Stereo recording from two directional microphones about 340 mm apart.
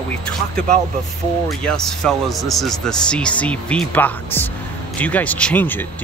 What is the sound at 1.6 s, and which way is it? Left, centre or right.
Speech, centre.